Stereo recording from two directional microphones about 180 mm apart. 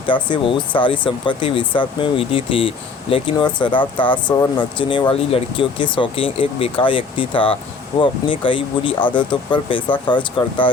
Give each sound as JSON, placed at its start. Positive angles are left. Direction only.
{"t": 0.0, "sound": "speech", "side_deg": 25}